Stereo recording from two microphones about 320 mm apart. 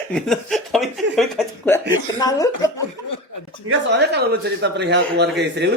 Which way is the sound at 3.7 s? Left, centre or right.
Right.